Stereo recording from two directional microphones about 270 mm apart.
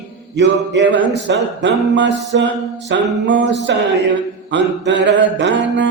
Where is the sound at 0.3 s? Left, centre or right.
Right.